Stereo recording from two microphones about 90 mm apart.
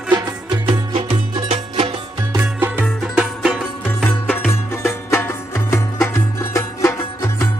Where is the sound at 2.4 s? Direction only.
25° right (ahead or behind).